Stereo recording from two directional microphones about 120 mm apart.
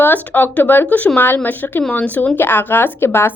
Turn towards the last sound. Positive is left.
turn(degrees=20)  # may be behind; listen again after turning